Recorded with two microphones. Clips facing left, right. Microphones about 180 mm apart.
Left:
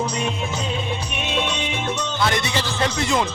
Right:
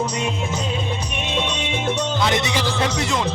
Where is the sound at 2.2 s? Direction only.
20° right (ahead or behind).